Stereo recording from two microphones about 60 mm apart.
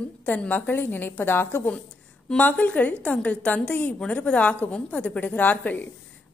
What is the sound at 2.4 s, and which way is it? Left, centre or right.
A woman's voice, left.